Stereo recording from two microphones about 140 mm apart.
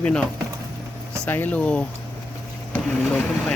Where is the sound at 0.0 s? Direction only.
5° left (ahead or behind).